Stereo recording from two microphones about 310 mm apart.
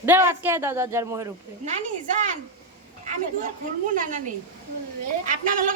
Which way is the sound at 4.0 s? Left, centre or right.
Right.